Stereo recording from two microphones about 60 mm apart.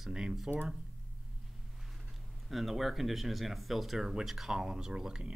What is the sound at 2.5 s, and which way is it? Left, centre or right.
Speech, centre.